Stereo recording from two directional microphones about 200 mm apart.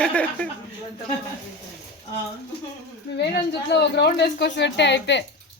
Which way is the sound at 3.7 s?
55° left (ahead or behind).